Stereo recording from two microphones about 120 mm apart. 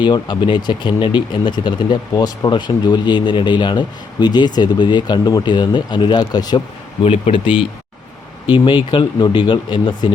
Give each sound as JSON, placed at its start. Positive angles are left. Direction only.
{"t": 0.0, "sound": "speech", "side_deg": 40}
{"t": 7.0, "sound": "speech", "side_deg": 50}